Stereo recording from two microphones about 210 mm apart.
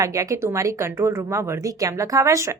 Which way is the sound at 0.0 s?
15° right (ahead or behind).